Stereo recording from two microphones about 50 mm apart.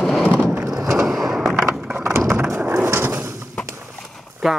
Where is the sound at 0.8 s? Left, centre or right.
Right.